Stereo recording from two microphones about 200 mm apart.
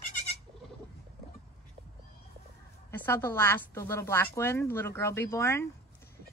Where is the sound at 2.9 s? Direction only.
10° left (ahead or behind).